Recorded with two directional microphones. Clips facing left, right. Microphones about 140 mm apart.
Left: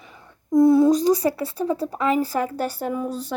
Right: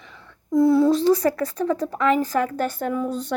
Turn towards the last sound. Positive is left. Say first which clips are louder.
# right 1 dB
turn(degrees=10)  # may be behind; listen again after turning